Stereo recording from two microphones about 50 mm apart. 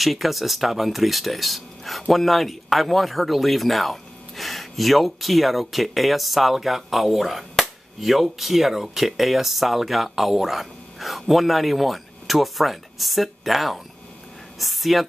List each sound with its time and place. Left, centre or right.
0.0 s speech: centre